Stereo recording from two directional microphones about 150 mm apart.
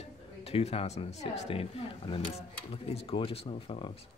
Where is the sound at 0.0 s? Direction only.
40° left (ahead or behind).